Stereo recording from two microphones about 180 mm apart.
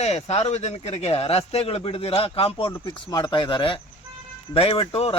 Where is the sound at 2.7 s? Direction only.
20° left (ahead or behind).